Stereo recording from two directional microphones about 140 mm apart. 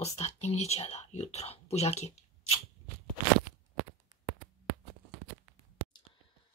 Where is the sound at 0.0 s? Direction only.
50° left (ahead or behind).